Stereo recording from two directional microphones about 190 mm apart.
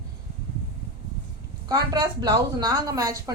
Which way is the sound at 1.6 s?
20° right (ahead or behind).